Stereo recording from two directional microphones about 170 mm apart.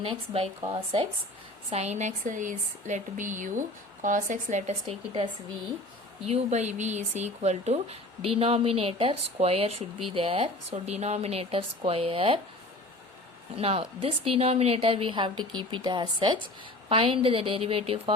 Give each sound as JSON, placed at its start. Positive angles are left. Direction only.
{"t": 0.0, "sound": "speech", "side_deg": -35}
{"t": 13.6, "sound": "speech", "side_deg": -35}